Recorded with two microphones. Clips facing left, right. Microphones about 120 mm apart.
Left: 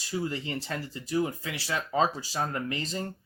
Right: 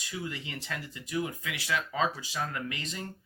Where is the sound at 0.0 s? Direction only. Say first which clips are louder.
Left 6 dB; 35° left (ahead or behind).